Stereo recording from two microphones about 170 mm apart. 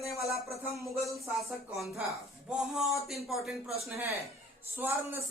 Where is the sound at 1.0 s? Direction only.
Centre (ahead or behind).